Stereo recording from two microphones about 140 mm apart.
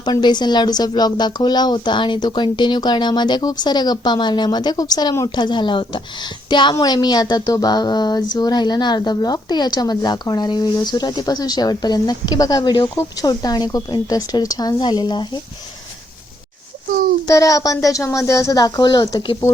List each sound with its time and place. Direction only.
0.0 s speech: 30° left (ahead or behind)
17.2 s speech: 25° left (ahead or behind)